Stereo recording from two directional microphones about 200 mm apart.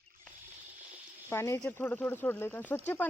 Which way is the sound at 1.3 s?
15° left (ahead or behind).